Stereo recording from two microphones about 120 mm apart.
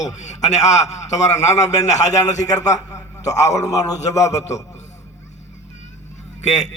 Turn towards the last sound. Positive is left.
turn(degrees=75)  # may be behind; listen again after turning